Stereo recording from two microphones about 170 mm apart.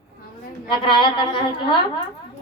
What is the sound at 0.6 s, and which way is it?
Speech, 30° left (ahead or behind).